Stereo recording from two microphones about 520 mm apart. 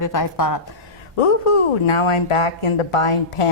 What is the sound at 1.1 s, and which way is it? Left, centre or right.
Speech, left.